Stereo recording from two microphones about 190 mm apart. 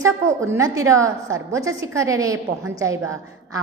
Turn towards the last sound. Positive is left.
turn(degrees=-15)  # may be behind; listen again after turning